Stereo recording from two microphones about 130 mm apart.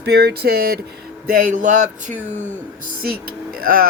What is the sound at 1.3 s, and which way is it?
Speech, 80° right.